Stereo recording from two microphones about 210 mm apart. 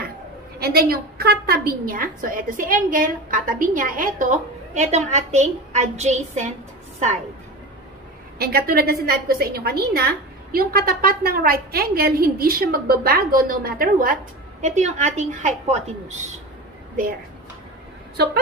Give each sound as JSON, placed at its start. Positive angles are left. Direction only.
{"t": 0.6, "sound": "a woman's voice", "side_deg": -50}
{"t": 8.4, "sound": "a woman's voice", "side_deg": -45}
{"t": 18.1, "sound": "a woman's voice", "side_deg": -50}